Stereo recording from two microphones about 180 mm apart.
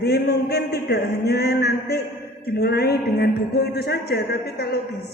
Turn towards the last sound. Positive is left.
turn(degrees=60)  # may be behind; listen again after turning